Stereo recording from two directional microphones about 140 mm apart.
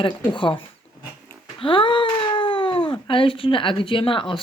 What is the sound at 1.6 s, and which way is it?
Speech, 35° left (ahead or behind).